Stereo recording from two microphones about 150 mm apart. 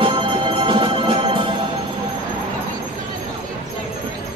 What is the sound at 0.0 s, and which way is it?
Music, 35° right (ahead or behind).